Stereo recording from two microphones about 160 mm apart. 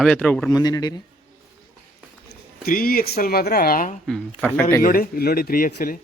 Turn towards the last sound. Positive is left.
turn(degrees=60)  # may be behind; listen again after turning